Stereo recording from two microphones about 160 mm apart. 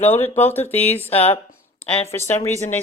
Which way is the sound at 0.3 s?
15° left (ahead or behind).